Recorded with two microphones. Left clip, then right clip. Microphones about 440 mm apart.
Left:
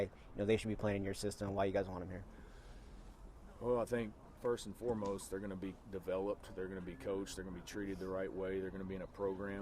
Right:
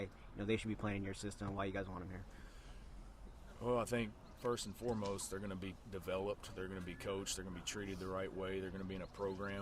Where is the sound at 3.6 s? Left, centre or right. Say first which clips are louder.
Left 1 dB; right.